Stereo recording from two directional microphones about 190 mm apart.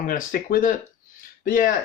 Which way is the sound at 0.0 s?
45° left (ahead or behind).